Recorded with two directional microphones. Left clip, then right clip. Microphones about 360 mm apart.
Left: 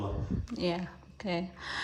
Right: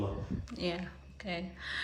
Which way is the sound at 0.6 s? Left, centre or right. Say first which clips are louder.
Left 3 dB; centre.